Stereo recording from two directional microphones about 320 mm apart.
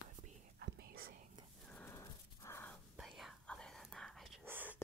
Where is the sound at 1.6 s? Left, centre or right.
Centre.